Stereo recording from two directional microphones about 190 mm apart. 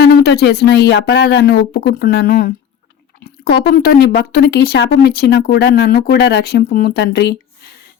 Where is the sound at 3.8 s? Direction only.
55° left (ahead or behind).